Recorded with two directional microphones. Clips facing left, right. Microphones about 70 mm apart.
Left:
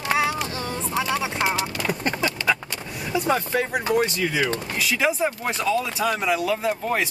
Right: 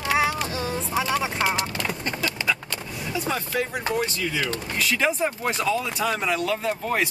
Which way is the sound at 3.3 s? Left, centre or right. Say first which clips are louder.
Left 5 dB; left.